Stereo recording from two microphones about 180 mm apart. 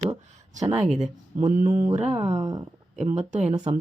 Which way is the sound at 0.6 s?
20° right (ahead or behind).